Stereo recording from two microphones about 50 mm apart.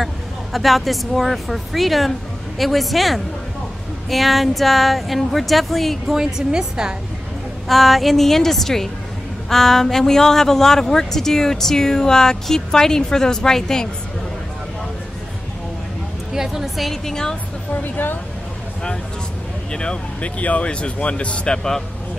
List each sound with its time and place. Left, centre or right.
0.0 s a woman's voice: centre
6.0 s a woman's voice: centre
7.6 s a woman's voice: centre
16.3 s a woman's voice: centre
17.7 s speech: left
19.7 s speech: centre